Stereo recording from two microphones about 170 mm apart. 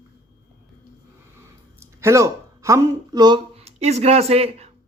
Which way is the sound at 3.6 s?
40° right (ahead or behind).